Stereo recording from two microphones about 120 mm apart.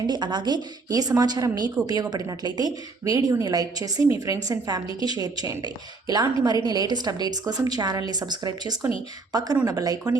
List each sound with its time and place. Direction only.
0.1 s a woman's voice: 35° right (ahead or behind)